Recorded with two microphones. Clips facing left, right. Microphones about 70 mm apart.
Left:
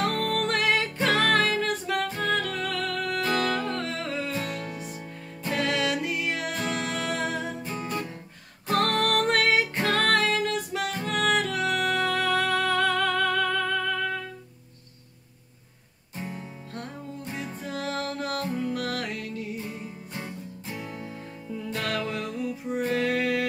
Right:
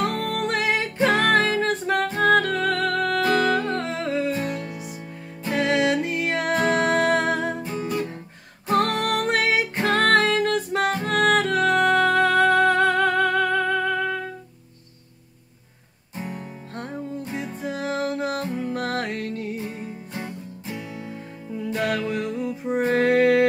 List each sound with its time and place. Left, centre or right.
0.0 s music: centre; by 3.4 s right
3.4 s music: right
4.6 s music: centre
5.5 s music: right
7.6 s music: right
9.8 s music: right
16.3 s music: right
17.3 s music: centre; by 19.7 s right
21.0 s music: centre; by 23.4 s right